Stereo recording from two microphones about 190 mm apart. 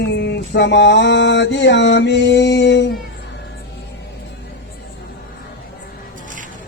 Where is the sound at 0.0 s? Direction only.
65° left (ahead or behind).